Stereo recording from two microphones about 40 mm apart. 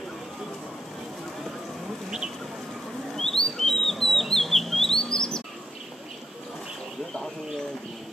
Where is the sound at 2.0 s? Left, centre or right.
Centre.